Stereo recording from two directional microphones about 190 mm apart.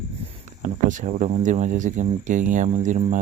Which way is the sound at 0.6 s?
40° right (ahead or behind).